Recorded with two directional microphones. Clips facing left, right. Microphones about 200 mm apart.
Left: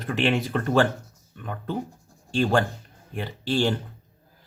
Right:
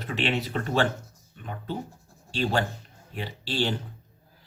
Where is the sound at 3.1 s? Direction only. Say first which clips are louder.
Left 5 dB; 50° left (ahead or behind).